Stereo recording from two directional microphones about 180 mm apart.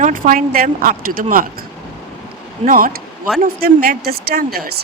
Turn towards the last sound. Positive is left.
turn(degrees=-60)  # may be behind; listen again after turning